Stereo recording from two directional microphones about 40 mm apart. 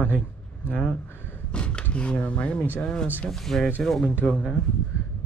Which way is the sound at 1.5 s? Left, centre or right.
Left.